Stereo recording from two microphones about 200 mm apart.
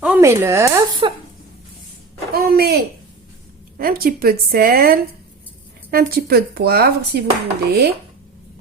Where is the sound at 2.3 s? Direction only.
50° right (ahead or behind).